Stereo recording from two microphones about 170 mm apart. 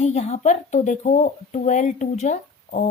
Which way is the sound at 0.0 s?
40° left (ahead or behind).